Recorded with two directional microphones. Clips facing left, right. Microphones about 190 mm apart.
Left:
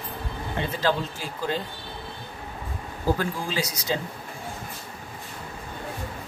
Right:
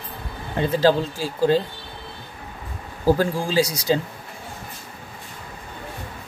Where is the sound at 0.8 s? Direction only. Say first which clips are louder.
Right 8 dB; 35° right (ahead or behind).